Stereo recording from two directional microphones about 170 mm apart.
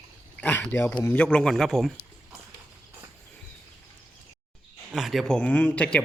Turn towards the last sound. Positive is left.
turn(degrees=5)  # may be behind; listen again after turning